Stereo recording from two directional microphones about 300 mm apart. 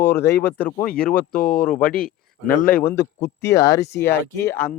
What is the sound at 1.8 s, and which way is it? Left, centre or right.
Speech, left.